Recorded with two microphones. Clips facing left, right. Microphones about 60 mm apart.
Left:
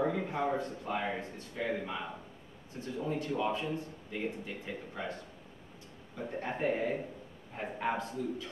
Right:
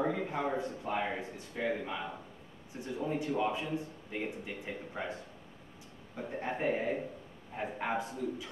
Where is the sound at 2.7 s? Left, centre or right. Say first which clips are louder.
Even; centre.